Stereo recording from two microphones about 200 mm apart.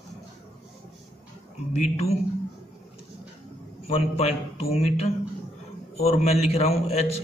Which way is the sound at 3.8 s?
30° left (ahead or behind).